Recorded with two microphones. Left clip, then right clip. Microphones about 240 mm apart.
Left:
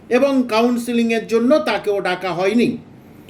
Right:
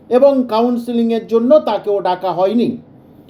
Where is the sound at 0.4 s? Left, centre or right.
Centre.